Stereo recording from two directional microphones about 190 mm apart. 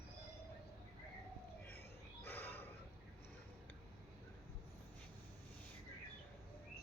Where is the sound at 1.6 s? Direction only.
10° left (ahead or behind).